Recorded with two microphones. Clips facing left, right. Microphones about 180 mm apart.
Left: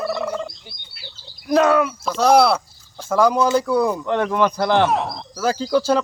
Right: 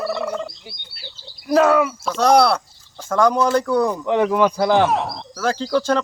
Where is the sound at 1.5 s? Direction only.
5° right (ahead or behind).